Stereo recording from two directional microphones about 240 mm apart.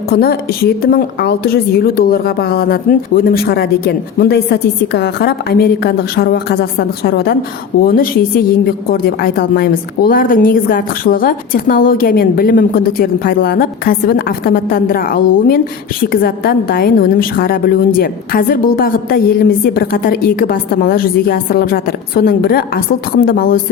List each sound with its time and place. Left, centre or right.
0.1 s a woman's voice: left